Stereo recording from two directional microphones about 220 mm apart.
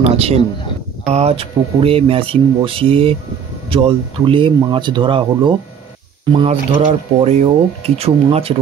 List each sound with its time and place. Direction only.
0.0 s speech: 30° right (ahead or behind)